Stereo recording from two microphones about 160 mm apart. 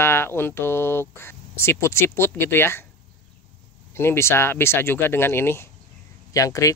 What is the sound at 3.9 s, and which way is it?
Speech, 15° left (ahead or behind).